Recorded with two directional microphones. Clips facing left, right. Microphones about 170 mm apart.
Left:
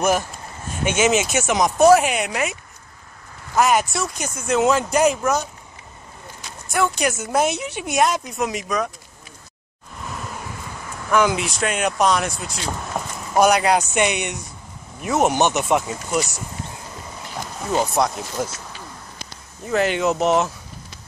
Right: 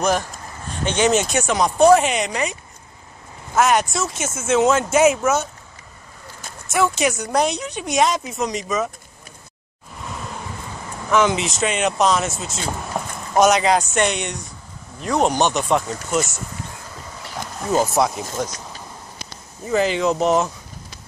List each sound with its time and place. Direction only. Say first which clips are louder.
0.8 s speech: right 1 dB; 5° left (ahead or behind)
3.5 s speech: right 1 dB; centre (ahead or behind)
6.7 s speech: right 2 dB; centre (ahead or behind)
11.1 s speech: right 1 dB; 5° left (ahead or behind)
13.4 s speech: right 1 dB; 10° left (ahead or behind)
15.3 s speech: even; 20° left (ahead or behind)
15.9 s speech: right 1 dB; 5° left (ahead or behind)
17.8 s speech: right 1 dB; centre (ahead or behind)
19.6 s speech: right 1 dB; centre (ahead or behind)